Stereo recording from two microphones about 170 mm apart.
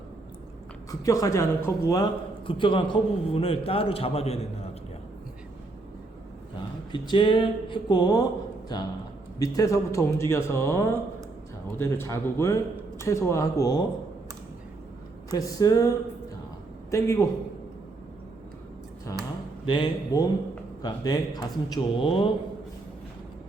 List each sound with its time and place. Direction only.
0.9 s speech: 20° left (ahead or behind)
2.5 s a man's voice: 30° left (ahead or behind)
6.6 s speech: 25° left (ahead or behind)
9.4 s speech: 20° left (ahead or behind)
15.3 s speech: 20° left (ahead or behind)
16.9 s speech: 15° left (ahead or behind)
19.1 s speech: 20° left (ahead or behind)